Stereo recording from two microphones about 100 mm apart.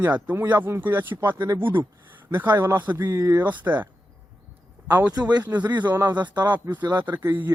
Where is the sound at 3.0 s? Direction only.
30° right (ahead or behind).